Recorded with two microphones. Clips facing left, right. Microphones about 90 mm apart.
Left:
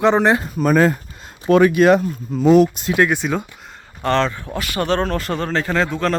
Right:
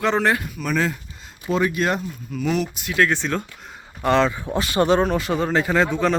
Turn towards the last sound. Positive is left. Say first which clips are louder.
# even
turn(degrees=-5)  # may be behind; listen again after turning